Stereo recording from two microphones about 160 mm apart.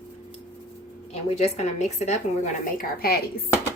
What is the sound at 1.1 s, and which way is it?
A woman's voice, 45° left (ahead or behind).